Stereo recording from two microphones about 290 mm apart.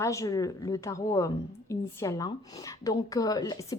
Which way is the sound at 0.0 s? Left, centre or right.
Centre.